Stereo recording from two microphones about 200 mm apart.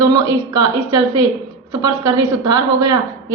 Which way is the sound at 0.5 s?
15° right (ahead or behind).